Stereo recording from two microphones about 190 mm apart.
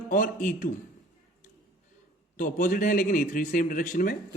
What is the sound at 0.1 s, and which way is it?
Speech, 45° left (ahead or behind).